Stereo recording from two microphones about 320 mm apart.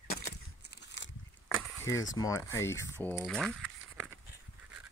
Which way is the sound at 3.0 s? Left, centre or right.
Centre.